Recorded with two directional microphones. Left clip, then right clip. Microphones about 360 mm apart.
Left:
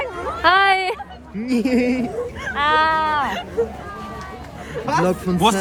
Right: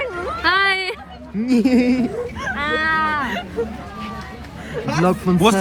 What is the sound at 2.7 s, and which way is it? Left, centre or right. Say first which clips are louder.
Speech: left 1 dB; centre.